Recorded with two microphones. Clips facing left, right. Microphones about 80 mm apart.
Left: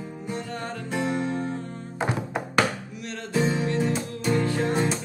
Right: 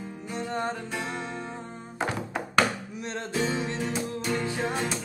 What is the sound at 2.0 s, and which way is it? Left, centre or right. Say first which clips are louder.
Music: left 2 dB; centre.